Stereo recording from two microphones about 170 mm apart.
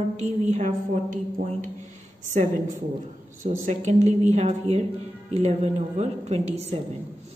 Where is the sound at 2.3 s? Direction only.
45° right (ahead or behind).